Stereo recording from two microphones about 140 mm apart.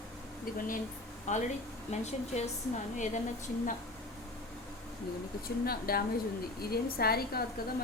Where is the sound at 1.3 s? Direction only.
60° left (ahead or behind).